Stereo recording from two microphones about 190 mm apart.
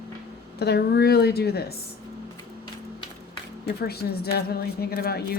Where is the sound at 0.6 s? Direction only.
60° left (ahead or behind).